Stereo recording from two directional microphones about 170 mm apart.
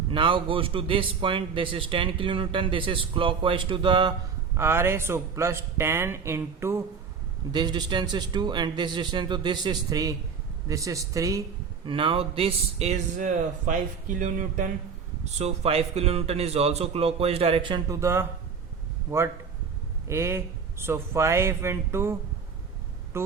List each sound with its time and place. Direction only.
0.1 s a man's voice: 30° right (ahead or behind)
4.5 s a man's voice: 15° right (ahead or behind)
7.5 s a man's voice: 25° right (ahead or behind)
11.9 s a man's voice: 30° right (ahead or behind); by 14.7 s 50° right (ahead or behind)
15.2 s a man's voice: 40° right (ahead or behind); by 22.1 s 15° right (ahead or behind)
23.1 s a man's voice: 15° right (ahead or behind)